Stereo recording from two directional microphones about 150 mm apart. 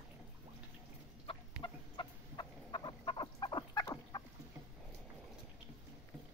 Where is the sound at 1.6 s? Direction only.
30° left (ahead or behind).